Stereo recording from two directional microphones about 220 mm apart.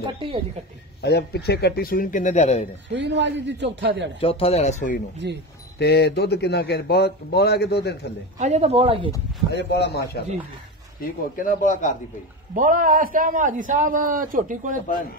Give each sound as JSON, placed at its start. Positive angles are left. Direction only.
{"t": 0.0, "sound": "a man's voice", "side_deg": -25}
{"t": 1.0, "sound": "speech", "side_deg": 50}
{"t": 3.0, "sound": "a man's voice", "side_deg": -55}
{"t": 4.2, "sound": "speech", "side_deg": 25}
{"t": 5.8, "sound": "speech", "side_deg": 50}
{"t": 8.4, "sound": "a man's voice", "side_deg": -30}
{"t": 9.5, "sound": "speech", "side_deg": 50}
{"t": 11.0, "sound": "speech", "side_deg": 40}
{"t": 12.5, "sound": "a man's voice", "side_deg": -40}